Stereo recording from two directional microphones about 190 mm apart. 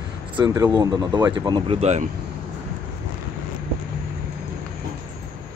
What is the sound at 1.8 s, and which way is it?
Speech, 35° right (ahead or behind).